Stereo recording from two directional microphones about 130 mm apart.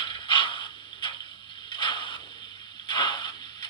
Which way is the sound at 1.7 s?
35° left (ahead or behind).